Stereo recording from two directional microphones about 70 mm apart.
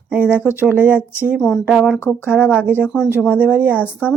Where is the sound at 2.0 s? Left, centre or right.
Left.